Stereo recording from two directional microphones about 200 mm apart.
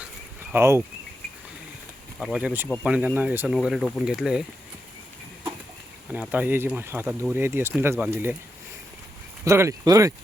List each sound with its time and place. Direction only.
0.5 s speech: 10° right (ahead or behind)
2.1 s speech: 5° right (ahead or behind)
6.1 s speech: 5° right (ahead or behind)
9.4 s speech: 15° right (ahead or behind)